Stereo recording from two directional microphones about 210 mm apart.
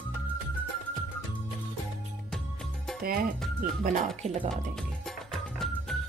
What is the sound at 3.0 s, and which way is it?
Speech, 45° right (ahead or behind).